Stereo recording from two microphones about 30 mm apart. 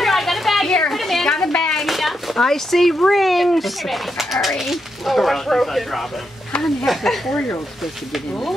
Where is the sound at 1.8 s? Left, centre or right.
Centre.